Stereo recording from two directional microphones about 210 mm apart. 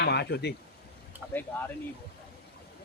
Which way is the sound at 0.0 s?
50° left (ahead or behind).